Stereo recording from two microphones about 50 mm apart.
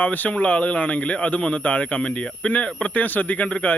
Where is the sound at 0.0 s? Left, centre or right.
Left.